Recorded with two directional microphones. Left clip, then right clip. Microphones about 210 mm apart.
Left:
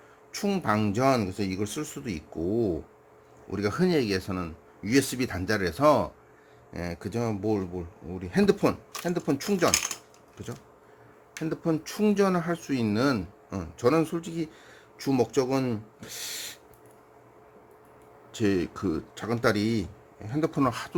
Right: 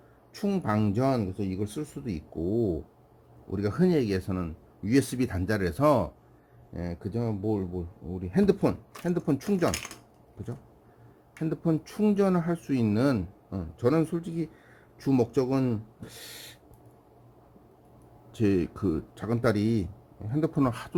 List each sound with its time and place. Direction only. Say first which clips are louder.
0.3 s speech: left 2 dB; 5° right (ahead or behind)
2.3 s speech: left 1 dB; 25° left (ahead or behind)
3.5 s speech: left 1 dB; 5° right (ahead or behind)
11.4 s speech: left 1 dB; 5° right (ahead or behind)
18.3 s speech: even; 10° right (ahead or behind)